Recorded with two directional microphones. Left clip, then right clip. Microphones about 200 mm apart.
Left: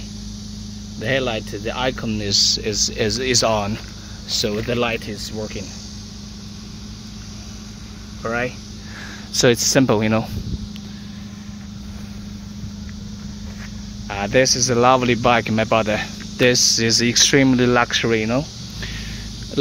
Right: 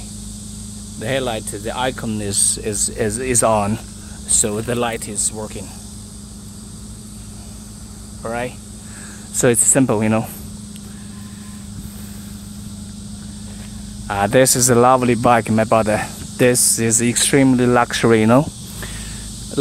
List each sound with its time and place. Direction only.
0.9 s speech: centre (ahead or behind)
8.2 s speech: 15° left (ahead or behind)
9.4 s speech: 5° right (ahead or behind)
14.0 s speech: 20° right (ahead or behind)
18.0 s speech: 25° right (ahead or behind)